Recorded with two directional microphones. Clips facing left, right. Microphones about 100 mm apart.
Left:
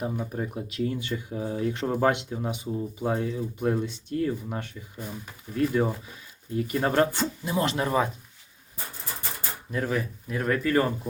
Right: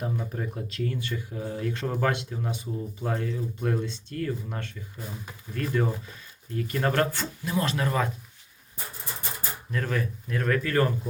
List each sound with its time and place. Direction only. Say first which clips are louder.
0.0 s speech: left 2 dB; 10° left (ahead or behind)
9.7 s speech: left 2 dB; 10° left (ahead or behind)